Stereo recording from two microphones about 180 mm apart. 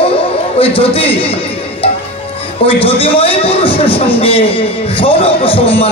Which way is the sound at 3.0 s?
30° left (ahead or behind).